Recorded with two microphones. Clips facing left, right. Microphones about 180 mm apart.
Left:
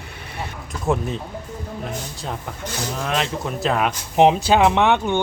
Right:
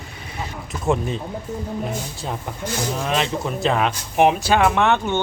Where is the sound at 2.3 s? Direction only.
5° right (ahead or behind).